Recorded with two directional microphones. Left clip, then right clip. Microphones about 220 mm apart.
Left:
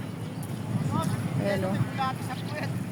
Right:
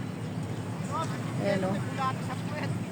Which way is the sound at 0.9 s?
45° left (ahead or behind).